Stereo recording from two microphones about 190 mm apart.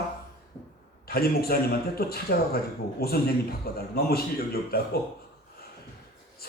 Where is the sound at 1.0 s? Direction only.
55° left (ahead or behind).